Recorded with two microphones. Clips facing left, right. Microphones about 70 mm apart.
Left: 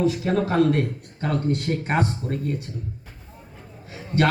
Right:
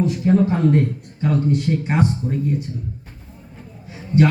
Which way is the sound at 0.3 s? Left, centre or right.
Left.